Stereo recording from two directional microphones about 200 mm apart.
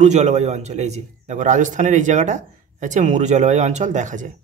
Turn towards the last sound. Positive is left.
turn(degrees=-40)  # may be behind; listen again after turning